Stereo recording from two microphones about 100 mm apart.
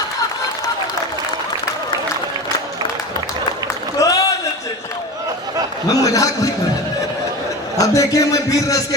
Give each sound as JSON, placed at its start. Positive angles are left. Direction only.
{"t": 4.0, "sound": "a sound", "side_deg": 40}
{"t": 5.9, "sound": "a man's voice", "side_deg": 35}
{"t": 7.8, "sound": "speech", "side_deg": 35}